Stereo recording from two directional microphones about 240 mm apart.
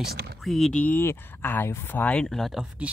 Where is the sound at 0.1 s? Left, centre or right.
Right.